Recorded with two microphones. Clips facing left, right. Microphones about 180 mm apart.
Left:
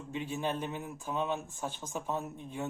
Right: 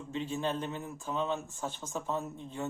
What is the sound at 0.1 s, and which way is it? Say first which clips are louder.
Speech: right 1 dB; 10° left (ahead or behind).